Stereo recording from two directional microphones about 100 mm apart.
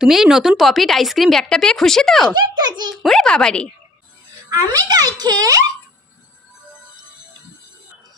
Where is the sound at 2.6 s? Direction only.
45° right (ahead or behind).